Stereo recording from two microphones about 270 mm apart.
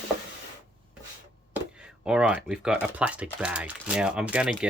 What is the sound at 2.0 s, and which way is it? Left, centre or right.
Speech, centre.